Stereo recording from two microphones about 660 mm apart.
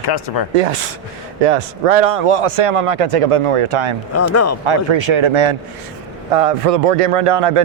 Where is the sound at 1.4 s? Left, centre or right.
Right.